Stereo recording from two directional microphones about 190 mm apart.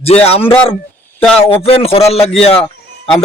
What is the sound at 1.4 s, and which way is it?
Speech, 30° left (ahead or behind).